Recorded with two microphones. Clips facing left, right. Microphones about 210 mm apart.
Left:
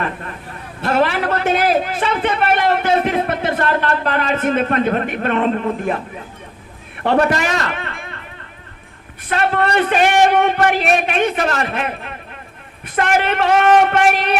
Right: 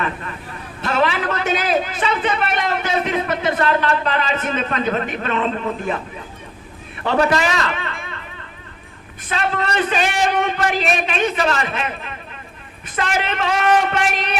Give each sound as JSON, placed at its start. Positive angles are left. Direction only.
{"t": 0.8, "sound": "a man's voice", "side_deg": 55}
{"t": 7.2, "sound": "a man's voice", "side_deg": 50}
{"t": 9.3, "sound": "a man's voice", "side_deg": 55}